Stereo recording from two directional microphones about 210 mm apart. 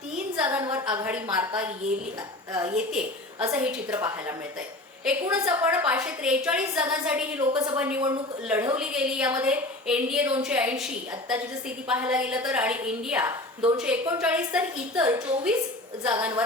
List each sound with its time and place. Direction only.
0.3 s a woman's voice: 10° right (ahead or behind)
2.7 s a woman's voice: 5° right (ahead or behind)
7.5 s a woman's voice: 20° right (ahead or behind)
7.8 s a woman's voice: 5° right (ahead or behind)
11.9 s a woman's voice: 5° right (ahead or behind)
16.1 s a woman's voice: 15° right (ahead or behind)